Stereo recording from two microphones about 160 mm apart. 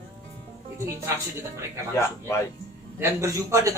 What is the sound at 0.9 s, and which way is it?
Speech, 15° right (ahead or behind).